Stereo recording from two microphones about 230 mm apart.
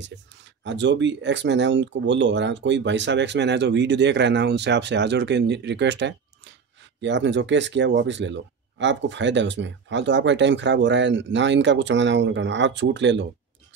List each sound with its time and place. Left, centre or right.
0.7 s speech: right